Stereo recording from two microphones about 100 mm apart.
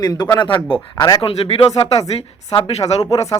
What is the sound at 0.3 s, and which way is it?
Speech, 55° left (ahead or behind).